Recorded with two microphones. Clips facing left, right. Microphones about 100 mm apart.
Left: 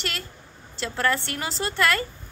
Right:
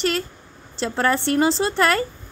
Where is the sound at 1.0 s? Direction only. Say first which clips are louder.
Right 7 dB; 30° right (ahead or behind).